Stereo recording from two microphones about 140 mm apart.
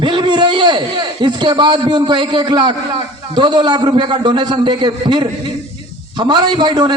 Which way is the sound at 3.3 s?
35° right (ahead or behind).